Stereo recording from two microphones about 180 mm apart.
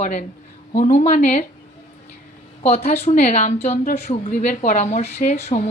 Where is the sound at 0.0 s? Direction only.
45° left (ahead or behind).